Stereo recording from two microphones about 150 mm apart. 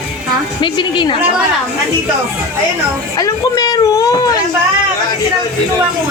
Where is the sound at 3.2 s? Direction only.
25° left (ahead or behind).